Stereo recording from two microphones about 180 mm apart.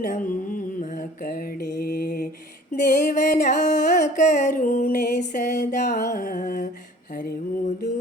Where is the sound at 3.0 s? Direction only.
45° left (ahead or behind).